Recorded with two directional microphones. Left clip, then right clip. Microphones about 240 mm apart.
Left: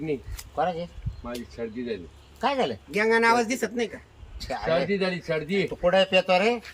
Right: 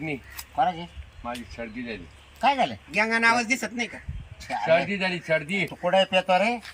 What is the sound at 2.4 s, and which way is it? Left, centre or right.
Speech, centre.